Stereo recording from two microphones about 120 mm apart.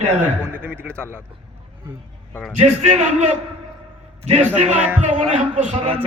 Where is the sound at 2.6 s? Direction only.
85° right.